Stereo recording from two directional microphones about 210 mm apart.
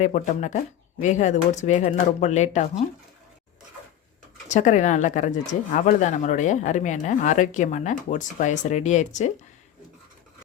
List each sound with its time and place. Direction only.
0.0 s speech: 35° left (ahead or behind)
4.4 s speech: 35° left (ahead or behind)